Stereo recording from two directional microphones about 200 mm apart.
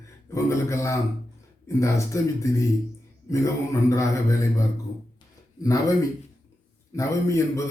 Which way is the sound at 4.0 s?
15° left (ahead or behind).